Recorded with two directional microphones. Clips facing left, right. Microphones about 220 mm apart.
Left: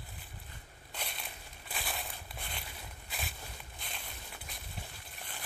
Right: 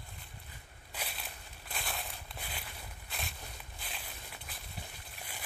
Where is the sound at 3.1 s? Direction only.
Centre (ahead or behind).